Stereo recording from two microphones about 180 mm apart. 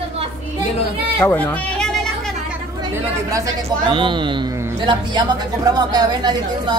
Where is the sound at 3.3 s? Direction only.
20° right (ahead or behind).